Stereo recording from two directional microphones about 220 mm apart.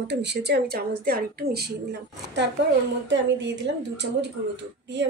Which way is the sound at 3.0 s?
55° right (ahead or behind).